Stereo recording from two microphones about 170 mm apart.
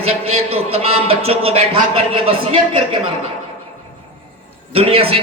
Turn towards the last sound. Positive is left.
turn(degrees=-35)  # may be behind; listen again after turning